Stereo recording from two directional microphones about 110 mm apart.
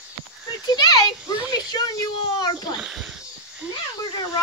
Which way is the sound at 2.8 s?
5° right (ahead or behind).